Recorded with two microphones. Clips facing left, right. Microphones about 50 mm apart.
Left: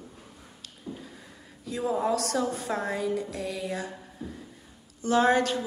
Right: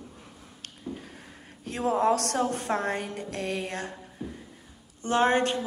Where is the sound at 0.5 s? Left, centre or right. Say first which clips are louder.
Right 2 dB; right.